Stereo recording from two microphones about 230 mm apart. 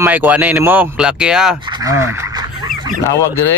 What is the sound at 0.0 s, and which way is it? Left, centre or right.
Speech, centre.